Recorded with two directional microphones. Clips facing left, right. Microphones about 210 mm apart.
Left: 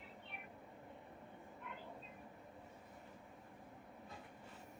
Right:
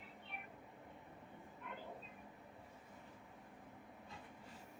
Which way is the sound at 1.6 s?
45° right (ahead or behind).